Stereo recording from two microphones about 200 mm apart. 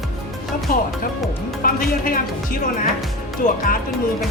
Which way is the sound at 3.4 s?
45° left (ahead or behind).